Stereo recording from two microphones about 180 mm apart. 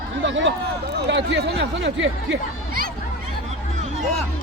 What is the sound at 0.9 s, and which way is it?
Speech, 75° right (ahead or behind).